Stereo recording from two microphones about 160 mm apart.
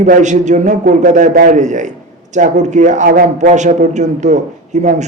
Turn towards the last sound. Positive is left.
turn(degrees=-50)  # may be behind; listen again after turning